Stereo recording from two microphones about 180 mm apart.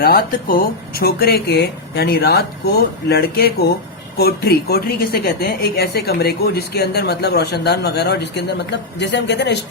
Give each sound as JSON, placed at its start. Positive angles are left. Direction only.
{"t": 0.0, "sound": "a woman's voice", "side_deg": 60}